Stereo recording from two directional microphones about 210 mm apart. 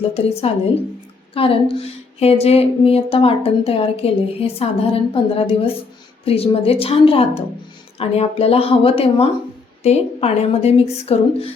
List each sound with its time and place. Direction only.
0.1 s a woman's voice: 30° left (ahead or behind)